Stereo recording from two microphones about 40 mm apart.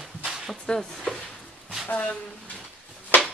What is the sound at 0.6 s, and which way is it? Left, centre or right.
Speech, centre.